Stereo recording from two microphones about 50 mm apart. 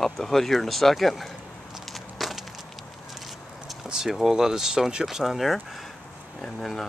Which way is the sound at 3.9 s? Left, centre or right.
Centre.